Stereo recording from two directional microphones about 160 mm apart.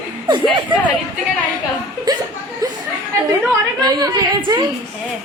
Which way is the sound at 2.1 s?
25° right (ahead or behind).